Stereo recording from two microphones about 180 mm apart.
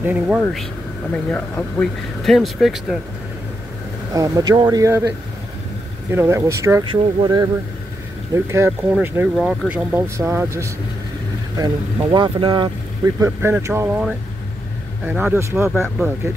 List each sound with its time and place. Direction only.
0.0 s speech: 10° right (ahead or behind)
0.4 s speech: centre (ahead or behind)
2.2 s speech: centre (ahead or behind)
4.1 s speech: 20° right (ahead or behind)
6.1 s speech: 15° right (ahead or behind)
8.5 s speech: 10° right (ahead or behind)
9.3 s speech: centre (ahead or behind); by 13.8 s 15° right (ahead or behind)
13.8 s speech: centre (ahead or behind)